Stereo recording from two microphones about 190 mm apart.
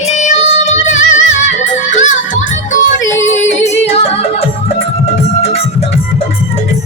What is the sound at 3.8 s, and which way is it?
Music, 30° left (ahead or behind).